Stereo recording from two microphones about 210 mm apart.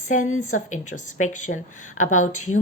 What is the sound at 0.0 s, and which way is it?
A woman's voice, 35° left (ahead or behind).